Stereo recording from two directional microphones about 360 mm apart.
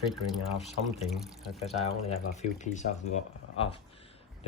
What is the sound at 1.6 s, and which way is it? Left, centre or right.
Speech, centre.